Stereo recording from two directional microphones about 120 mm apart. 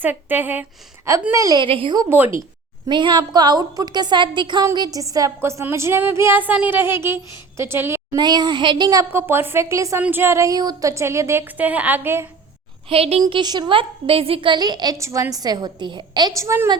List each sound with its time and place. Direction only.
0.0 s a woman's voice: 15° right (ahead or behind)
1.3 s a sound: 30° right (ahead or behind)
1.6 s speech: 45° right (ahead or behind)
2.0 s a woman's voice: 15° right (ahead or behind)
2.9 s a woman's voice: 40° right (ahead or behind)
4.6 s a sound: 35° right (ahead or behind)
8.1 s a woman's voice: 35° right (ahead or behind)
9.1 s a sound: 20° right (ahead or behind)
12.9 s a woman's voice: 55° right (ahead or behind)
13.2 s a woman's voice: 35° right (ahead or behind)
14.9 s a woman's voice: 25° right (ahead or behind)